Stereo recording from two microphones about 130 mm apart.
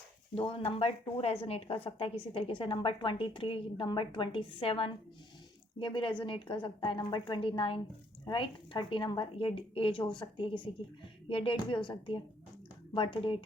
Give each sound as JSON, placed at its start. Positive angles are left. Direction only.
{"t": 0.3, "sound": "a woman's voice", "side_deg": 45}